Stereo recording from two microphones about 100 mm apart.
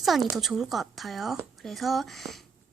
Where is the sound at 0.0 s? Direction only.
Centre (ahead or behind).